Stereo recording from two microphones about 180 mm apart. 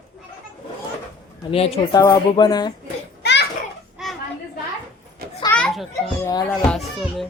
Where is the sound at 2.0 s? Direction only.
20° left (ahead or behind).